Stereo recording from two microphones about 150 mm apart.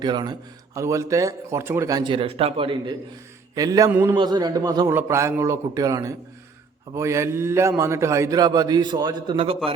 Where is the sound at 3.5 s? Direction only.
25° right (ahead or behind).